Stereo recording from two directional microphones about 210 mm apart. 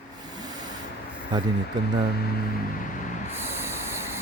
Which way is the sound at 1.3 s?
20° right (ahead or behind).